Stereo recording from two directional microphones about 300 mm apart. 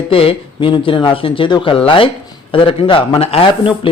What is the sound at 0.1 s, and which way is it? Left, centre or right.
Speech, centre.